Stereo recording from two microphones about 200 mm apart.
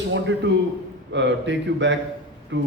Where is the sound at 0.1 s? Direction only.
65° right (ahead or behind).